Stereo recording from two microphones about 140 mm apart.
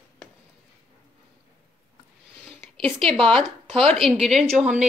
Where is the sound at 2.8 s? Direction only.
5° left (ahead or behind).